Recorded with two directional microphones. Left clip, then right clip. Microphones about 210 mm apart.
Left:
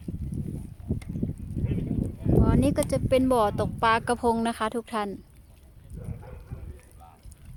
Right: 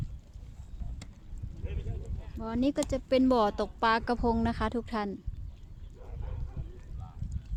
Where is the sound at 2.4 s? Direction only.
10° left (ahead or behind).